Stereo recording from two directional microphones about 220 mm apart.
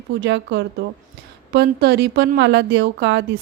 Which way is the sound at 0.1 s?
55° right (ahead or behind).